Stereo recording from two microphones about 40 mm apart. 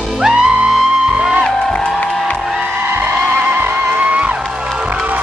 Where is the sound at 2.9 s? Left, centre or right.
Right.